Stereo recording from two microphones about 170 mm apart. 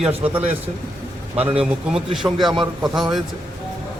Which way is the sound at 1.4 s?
35° right (ahead or behind).